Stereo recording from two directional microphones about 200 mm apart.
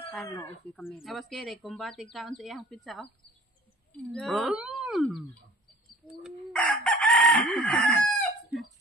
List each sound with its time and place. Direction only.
0.3 s speech: 15° left (ahead or behind)
0.7 s speech: centre (ahead or behind)
6.2 s chicken: 5° left (ahead or behind)